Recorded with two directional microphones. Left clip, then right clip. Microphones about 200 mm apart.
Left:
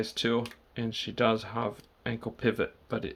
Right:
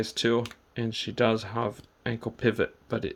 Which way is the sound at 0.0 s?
25° right (ahead or behind).